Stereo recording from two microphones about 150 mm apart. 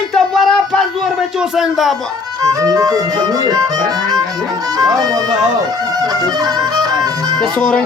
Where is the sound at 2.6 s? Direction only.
25° right (ahead or behind).